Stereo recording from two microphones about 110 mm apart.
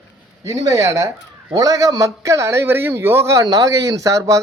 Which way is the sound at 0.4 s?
30° right (ahead or behind).